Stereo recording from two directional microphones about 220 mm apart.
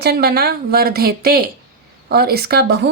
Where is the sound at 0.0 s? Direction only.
45° right (ahead or behind).